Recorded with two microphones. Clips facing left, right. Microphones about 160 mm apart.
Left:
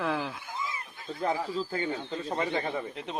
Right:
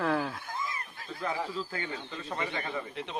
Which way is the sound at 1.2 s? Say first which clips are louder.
Left 4 dB; 35° left (ahead or behind).